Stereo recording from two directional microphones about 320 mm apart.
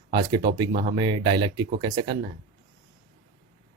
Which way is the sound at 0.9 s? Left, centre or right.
Centre.